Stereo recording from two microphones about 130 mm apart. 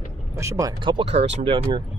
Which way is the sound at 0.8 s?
40° right (ahead or behind).